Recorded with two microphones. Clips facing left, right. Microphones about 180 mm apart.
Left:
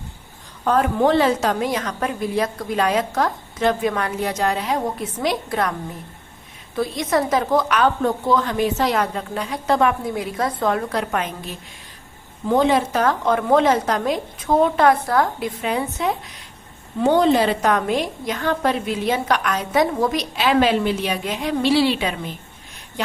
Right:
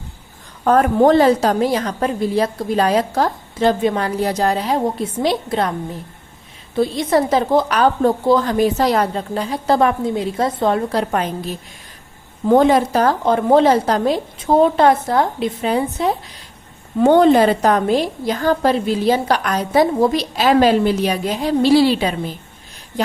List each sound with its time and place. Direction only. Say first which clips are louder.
0.6 s a woman's voice: right 5 dB; 45° right (ahead or behind); by 5.7 s 30° right (ahead or behind)
6.7 s a woman's voice: right 4 dB; 30° right (ahead or behind)
12.5 s a woman's voice: right 5 dB; 45° right (ahead or behind)
17.0 s a woman's voice: right 5 dB; 55° right (ahead or behind)
17.6 s a woman's voice: right 4 dB; 35° right (ahead or behind)